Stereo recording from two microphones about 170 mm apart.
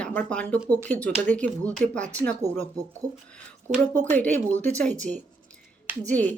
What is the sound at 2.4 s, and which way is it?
Speech, 20° right (ahead or behind).